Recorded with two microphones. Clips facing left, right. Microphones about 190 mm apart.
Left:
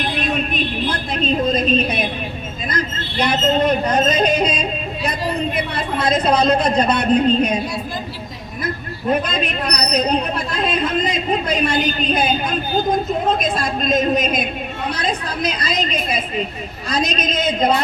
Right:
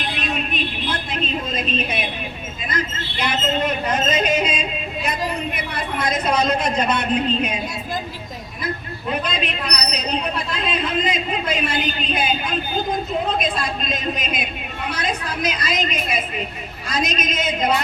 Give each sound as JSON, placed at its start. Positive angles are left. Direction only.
{"t": 0.2, "sound": "a sound", "side_deg": 45}
{"t": 5.5, "sound": "a woman's voice", "side_deg": 30}
{"t": 9.2, "sound": "a woman's voice", "side_deg": 45}